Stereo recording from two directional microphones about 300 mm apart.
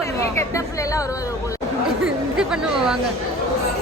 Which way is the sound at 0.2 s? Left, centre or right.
Centre.